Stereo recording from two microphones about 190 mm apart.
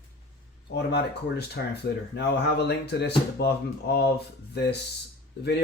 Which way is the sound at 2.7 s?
65° left (ahead or behind).